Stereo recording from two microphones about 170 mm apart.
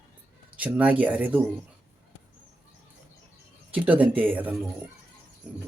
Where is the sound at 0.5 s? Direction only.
10° right (ahead or behind).